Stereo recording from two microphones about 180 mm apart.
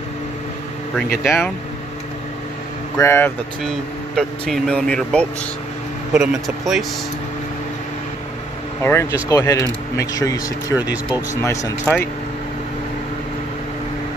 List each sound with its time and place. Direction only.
1.2 s speech: 15° left (ahead or behind)
3.0 s speech: 15° left (ahead or behind)
3.6 s speech: centre (ahead or behind)
8.8 s speech: 15° left (ahead or behind)